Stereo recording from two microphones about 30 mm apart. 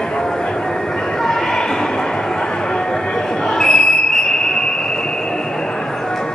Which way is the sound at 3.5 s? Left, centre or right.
Left.